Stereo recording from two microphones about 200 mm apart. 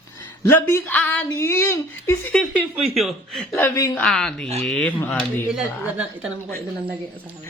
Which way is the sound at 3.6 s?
15° left (ahead or behind).